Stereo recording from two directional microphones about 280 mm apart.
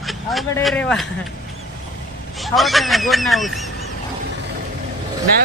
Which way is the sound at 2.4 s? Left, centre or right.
Centre.